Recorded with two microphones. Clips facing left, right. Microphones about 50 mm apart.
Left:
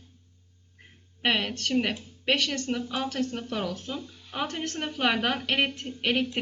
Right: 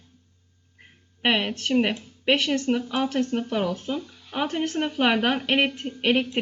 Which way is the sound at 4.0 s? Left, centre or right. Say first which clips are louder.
Right 1 dB; right.